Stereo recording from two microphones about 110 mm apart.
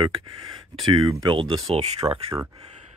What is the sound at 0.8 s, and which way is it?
Speech, 45° right (ahead or behind).